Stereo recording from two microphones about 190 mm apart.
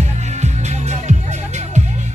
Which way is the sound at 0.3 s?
35° right (ahead or behind).